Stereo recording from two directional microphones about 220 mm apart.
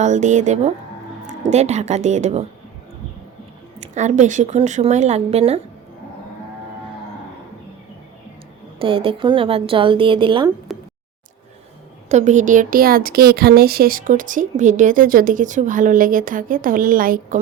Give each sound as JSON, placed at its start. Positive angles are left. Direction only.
{"t": 0.0, "sound": "speech", "side_deg": -35}
{"t": 3.8, "sound": "speech", "side_deg": -35}
{"t": 8.8, "sound": "a woman's voice", "side_deg": -25}
{"t": 10.7, "sound": "a sound", "side_deg": 0}
{"t": 12.0, "sound": "speech", "side_deg": -30}